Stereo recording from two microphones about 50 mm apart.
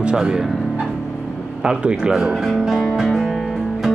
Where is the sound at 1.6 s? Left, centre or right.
Centre.